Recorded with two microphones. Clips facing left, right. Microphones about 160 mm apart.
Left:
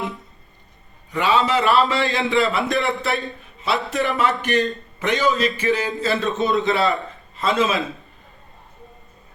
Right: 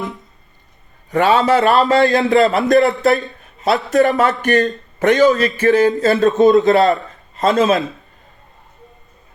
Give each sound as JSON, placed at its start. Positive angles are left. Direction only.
{"t": 1.1, "sound": "a man's voice", "side_deg": -40}